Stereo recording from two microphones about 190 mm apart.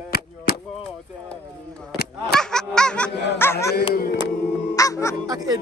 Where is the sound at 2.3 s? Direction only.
5° left (ahead or behind).